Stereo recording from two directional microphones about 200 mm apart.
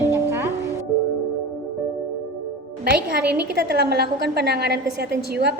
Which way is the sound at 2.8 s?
50° right (ahead or behind).